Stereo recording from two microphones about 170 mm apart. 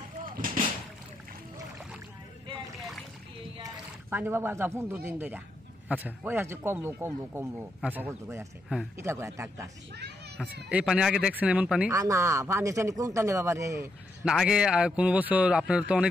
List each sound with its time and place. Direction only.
0.2 s vehicle: 55° right (ahead or behind)
2.8 s rowboat: centre (ahead or behind)
4.1 s a man's voice: 10° right (ahead or behind)
10.7 s a man's voice: 5° right (ahead or behind)
11.9 s a man's voice: 20° right (ahead or behind)
14.2 s a man's voice: 5° right (ahead or behind)